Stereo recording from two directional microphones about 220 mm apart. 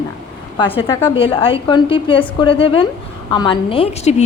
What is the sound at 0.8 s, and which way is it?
A woman's voice, 25° left (ahead or behind).